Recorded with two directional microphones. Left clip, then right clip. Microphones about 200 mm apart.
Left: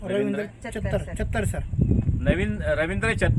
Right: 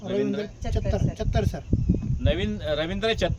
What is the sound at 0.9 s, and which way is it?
Speech, 25° left (ahead or behind).